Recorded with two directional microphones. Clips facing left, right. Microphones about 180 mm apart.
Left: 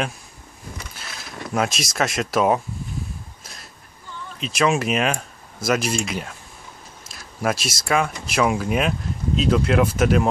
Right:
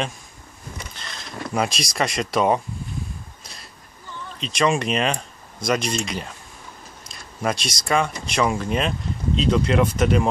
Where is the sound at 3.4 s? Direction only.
Centre (ahead or behind).